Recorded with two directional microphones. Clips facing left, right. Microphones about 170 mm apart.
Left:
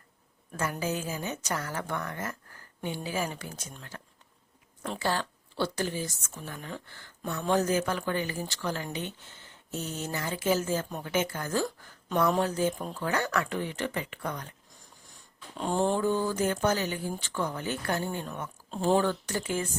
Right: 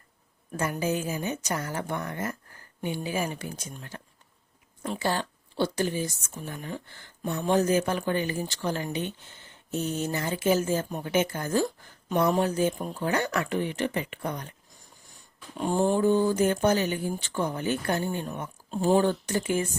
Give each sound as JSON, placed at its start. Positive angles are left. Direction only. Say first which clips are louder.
{"t": 0.5, "sound": "speech", "louder": "right 3 dB", "side_deg": -15}
{"t": 15.5, "sound": "speech", "louder": "right 3 dB", "side_deg": -10}
{"t": 18.9, "sound": "speech", "louder": "right 3 dB", "side_deg": -20}